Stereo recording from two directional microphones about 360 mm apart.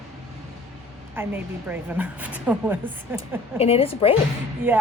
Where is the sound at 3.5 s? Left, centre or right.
Centre.